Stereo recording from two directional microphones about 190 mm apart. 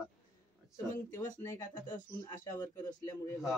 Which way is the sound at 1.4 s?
10° left (ahead or behind).